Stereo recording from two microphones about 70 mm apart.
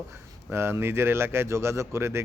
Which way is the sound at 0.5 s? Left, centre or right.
Right.